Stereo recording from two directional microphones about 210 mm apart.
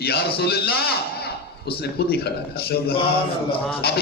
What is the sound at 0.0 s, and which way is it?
A man's voice, 50° left (ahead or behind).